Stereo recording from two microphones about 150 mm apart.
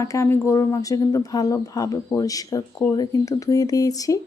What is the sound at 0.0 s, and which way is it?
Speech, 20° left (ahead or behind).